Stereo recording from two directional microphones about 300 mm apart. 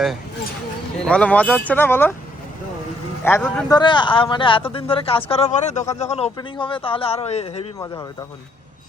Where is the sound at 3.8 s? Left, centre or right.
Centre.